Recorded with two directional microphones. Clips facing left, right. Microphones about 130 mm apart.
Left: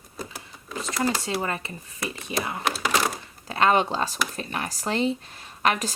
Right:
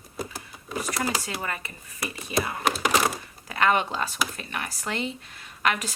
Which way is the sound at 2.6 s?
5° right (ahead or behind).